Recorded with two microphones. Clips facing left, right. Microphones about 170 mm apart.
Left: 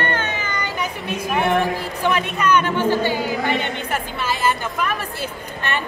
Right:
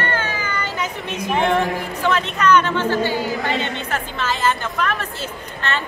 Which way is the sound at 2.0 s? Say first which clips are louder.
Right 1 dB; 10° left (ahead or behind).